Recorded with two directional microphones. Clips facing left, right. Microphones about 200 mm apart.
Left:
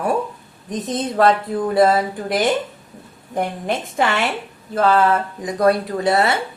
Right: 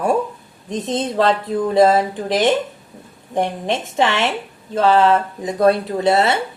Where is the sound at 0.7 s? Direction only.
25° right (ahead or behind).